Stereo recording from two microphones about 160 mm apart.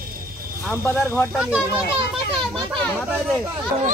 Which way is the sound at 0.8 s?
15° left (ahead or behind).